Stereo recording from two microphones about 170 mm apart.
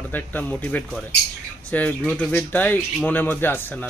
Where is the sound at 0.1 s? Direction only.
10° left (ahead or behind).